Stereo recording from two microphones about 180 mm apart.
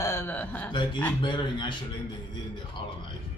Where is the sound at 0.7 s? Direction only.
25° left (ahead or behind).